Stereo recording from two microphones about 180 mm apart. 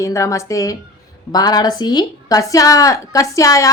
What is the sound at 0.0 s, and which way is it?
A woman's voice, 15° left (ahead or behind).